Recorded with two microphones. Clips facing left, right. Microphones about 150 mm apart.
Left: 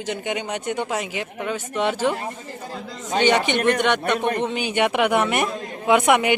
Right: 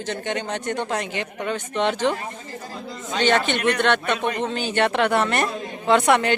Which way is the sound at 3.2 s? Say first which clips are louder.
Left 1 dB; 15° left (ahead or behind).